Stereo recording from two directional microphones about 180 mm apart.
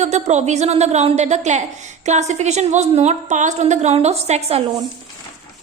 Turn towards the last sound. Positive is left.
turn(degrees=-35)  # may be behind; listen again after turning